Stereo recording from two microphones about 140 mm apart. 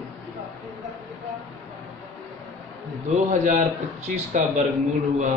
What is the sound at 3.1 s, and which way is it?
Speech, 60° right (ahead or behind).